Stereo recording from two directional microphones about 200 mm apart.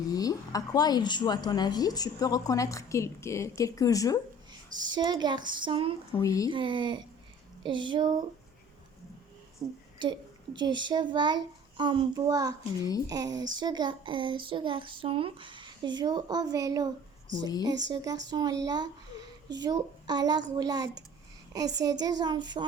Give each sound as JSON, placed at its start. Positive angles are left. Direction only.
{"t": 0.1, "sound": "a woman's voice", "side_deg": 20}
{"t": 4.9, "sound": "a child's voice", "side_deg": -20}
{"t": 6.1, "sound": "a woman's voice", "side_deg": 15}
{"t": 6.5, "sound": "a child's voice", "side_deg": -25}
{"t": 9.6, "sound": "a child's voice", "side_deg": -20}